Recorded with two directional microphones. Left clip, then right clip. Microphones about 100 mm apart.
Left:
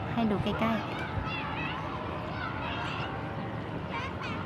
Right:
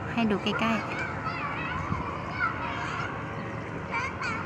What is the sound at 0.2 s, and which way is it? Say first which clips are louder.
Speech: right 3 dB; 5° right (ahead or behind).